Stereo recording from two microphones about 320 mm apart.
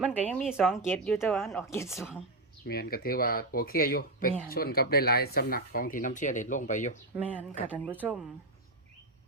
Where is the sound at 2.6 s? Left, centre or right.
Left.